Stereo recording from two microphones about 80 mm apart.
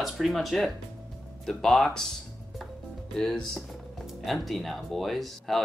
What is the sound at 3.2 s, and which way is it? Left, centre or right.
Speech, centre.